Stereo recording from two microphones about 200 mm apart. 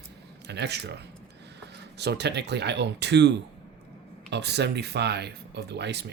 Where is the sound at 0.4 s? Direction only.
55° right (ahead or behind).